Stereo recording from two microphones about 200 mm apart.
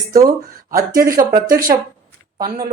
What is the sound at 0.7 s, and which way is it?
Speech, 15° right (ahead or behind).